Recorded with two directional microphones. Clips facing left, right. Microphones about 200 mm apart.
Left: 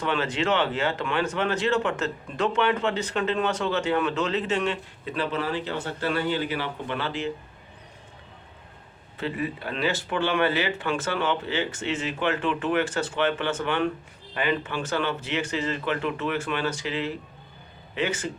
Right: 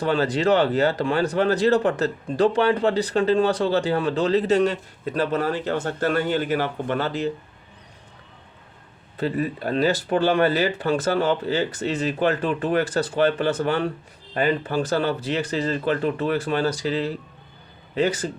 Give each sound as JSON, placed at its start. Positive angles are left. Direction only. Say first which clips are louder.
{"t": 0.0, "sound": "speech", "louder": "right 5 dB", "side_deg": -35}
{"t": 9.1, "sound": "speech", "louder": "right 5 dB", "side_deg": -40}